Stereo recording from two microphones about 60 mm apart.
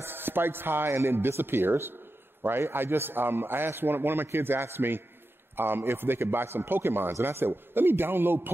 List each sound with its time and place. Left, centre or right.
0.0 s speech: right